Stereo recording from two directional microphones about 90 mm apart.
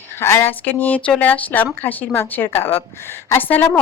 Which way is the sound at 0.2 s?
30° left (ahead or behind).